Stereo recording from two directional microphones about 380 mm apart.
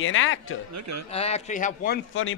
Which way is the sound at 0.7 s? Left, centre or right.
Right.